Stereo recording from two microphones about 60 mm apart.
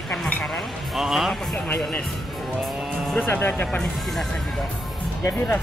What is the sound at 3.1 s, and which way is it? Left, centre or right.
Speech, left.